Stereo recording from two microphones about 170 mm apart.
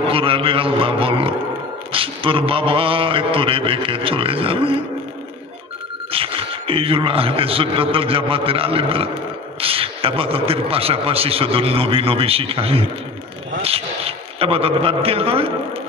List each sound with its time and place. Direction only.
0.0 s a man's voice: 30° right (ahead or behind)
6.1 s a man's voice: 30° right (ahead or behind)